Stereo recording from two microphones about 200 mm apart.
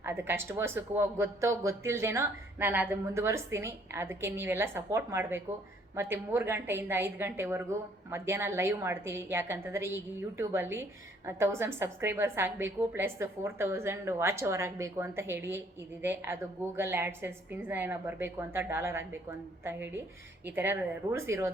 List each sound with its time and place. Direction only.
0.0 s a woman's voice: 10° right (ahead or behind)
20.4 s a woman's voice: 10° right (ahead or behind)